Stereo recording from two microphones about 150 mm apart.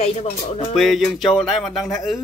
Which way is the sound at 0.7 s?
Centre (ahead or behind).